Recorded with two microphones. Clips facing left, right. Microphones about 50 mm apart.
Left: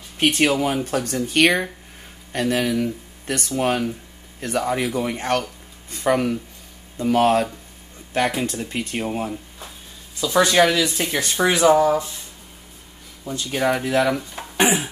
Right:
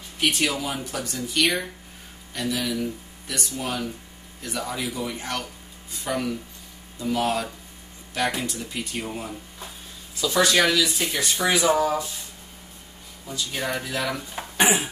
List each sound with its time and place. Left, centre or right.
0.2 s speech: left
10.3 s speech: left
10.8 s speech: left
13.2 s speech: left
14.4 s a sound: centre